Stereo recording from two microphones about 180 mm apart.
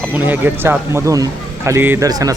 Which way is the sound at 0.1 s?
10° right (ahead or behind).